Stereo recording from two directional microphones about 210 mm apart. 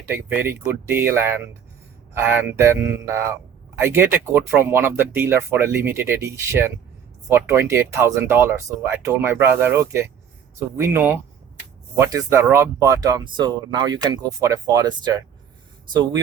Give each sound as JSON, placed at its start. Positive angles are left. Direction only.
{"t": 0.0, "sound": "speech", "side_deg": -10}